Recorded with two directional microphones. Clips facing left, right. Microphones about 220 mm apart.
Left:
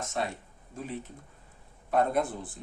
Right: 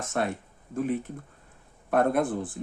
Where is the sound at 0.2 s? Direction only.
60° right (ahead or behind).